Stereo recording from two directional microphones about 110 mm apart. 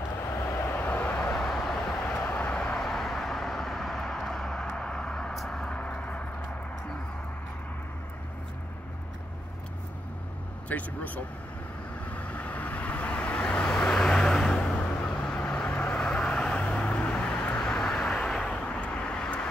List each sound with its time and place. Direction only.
0.7 s vehicle: 15° left (ahead or behind)
10.7 s speech: 15° left (ahead or behind)
12.1 s vehicle: 15° left (ahead or behind)